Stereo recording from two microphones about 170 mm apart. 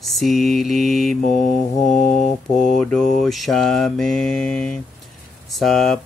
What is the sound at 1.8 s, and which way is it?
Mantra, 45° left (ahead or behind).